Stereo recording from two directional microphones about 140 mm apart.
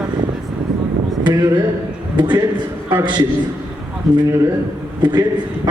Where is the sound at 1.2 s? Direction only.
30° right (ahead or behind).